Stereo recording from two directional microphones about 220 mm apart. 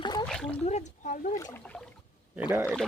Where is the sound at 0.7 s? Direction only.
30° left (ahead or behind).